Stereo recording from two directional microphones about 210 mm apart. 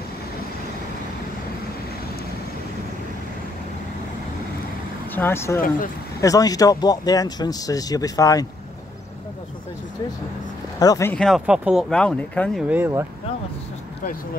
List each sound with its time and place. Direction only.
5.1 s speech: 10° left (ahead or behind)
10.8 s speech: 15° left (ahead or behind); by 13.0 s 10° right (ahead or behind)